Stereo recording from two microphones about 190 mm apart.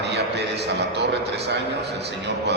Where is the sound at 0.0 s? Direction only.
60° right (ahead or behind).